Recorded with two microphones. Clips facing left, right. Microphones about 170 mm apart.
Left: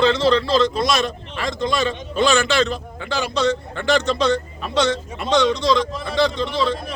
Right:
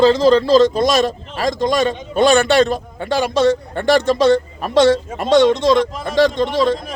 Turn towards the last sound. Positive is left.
turn(degrees=-45)  # may be behind; listen again after turning